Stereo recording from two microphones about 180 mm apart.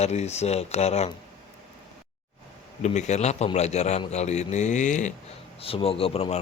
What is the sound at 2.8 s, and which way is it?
Speech, 40° left (ahead or behind).